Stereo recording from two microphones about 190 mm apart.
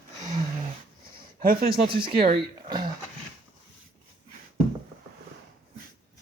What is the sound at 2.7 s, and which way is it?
Speech, 20° right (ahead or behind).